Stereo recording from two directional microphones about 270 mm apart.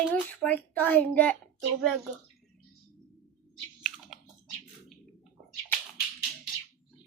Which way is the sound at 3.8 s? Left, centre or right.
Centre.